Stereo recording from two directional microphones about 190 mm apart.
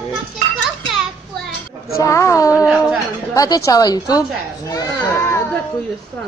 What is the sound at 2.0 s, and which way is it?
Speech, 15° left (ahead or behind).